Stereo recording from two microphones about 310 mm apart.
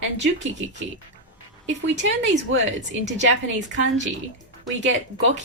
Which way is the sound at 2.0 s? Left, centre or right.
Right.